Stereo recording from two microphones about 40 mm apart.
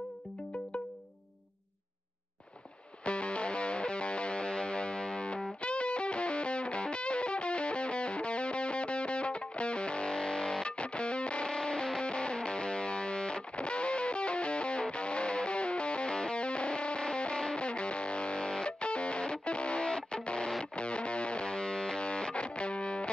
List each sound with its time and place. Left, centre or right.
3.1 s music: left